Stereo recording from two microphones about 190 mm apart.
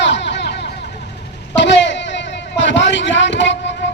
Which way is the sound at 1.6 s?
70° left (ahead or behind).